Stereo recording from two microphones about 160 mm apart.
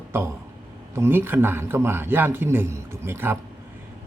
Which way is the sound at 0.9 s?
15° right (ahead or behind).